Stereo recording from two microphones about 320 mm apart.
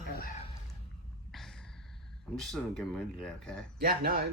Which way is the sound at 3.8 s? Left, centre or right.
Right.